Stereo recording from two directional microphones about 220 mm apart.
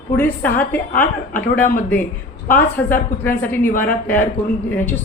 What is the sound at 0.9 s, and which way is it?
Speech, 40° left (ahead or behind).